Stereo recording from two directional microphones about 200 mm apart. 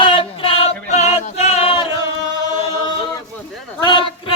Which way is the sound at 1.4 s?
30° left (ahead or behind).